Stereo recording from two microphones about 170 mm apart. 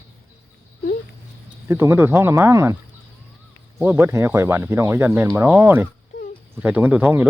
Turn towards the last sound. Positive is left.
turn(degrees=-10)  # may be behind; listen again after turning